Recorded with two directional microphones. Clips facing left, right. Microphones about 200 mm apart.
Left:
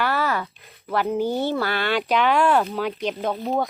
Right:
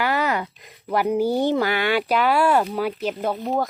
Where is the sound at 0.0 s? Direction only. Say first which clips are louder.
Right 1 dB; 15° right (ahead or behind).